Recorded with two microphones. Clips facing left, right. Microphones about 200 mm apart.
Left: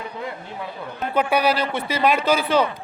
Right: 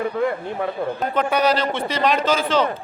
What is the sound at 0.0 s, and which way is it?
Speech, 55° right (ahead or behind).